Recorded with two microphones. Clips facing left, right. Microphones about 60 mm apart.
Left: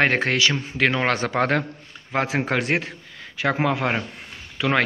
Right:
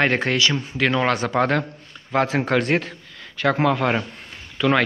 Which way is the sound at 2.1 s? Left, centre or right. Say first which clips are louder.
Right 3 dB; left.